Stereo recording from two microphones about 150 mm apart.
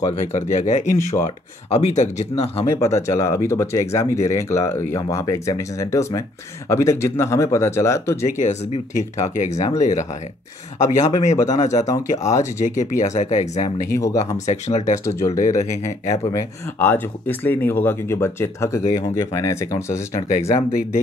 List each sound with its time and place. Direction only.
0.1 s speech: 50° left (ahead or behind)
2.7 s speech: 20° left (ahead or behind)
8.4 s speech: 50° left (ahead or behind)
11.3 s speech: 20° left (ahead or behind)
12.6 s speech: 55° left (ahead or behind)
13.9 s speech: 20° left (ahead or behind)
14.4 s speech: 50° left (ahead or behind)
15.0 s speech: 20° left (ahead or behind)
15.3 s speech: 50° left (ahead or behind)
16.1 s speech: 20° left (ahead or behind)
20.2 s speech: 45° left (ahead or behind)